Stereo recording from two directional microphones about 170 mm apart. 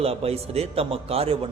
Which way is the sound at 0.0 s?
35° right (ahead or behind).